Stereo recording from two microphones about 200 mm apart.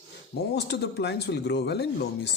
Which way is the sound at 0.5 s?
55° left (ahead or behind).